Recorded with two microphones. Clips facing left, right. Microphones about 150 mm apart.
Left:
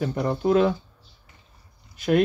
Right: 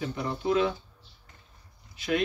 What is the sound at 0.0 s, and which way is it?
Speech, 50° left (ahead or behind).